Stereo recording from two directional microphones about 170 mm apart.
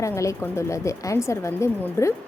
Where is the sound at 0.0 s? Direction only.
20° left (ahead or behind).